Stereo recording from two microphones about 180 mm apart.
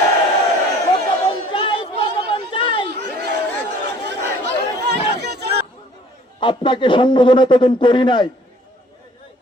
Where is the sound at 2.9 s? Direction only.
65° right (ahead or behind).